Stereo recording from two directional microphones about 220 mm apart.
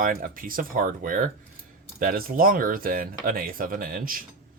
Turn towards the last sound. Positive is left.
turn(degrees=-40)  # may be behind; listen again after turning